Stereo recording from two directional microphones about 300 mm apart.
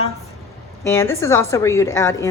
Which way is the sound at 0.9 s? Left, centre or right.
Centre.